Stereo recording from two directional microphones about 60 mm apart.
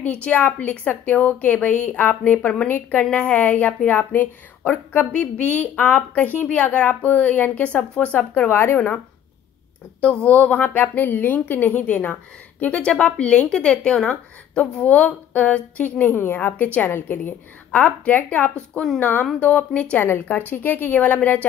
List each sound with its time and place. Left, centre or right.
0.0 s a woman's voice: left
10.0 s a woman's voice: left
17.6 s a woman's voice: left